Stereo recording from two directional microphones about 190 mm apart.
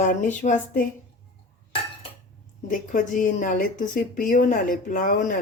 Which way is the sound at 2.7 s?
45° left (ahead or behind).